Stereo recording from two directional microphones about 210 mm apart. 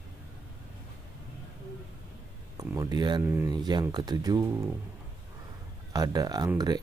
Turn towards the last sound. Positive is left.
turn(degrees=-20)  # may be behind; listen again after turning